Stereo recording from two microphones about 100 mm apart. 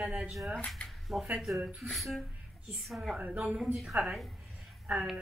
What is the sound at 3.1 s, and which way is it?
Speech, 15° right (ahead or behind).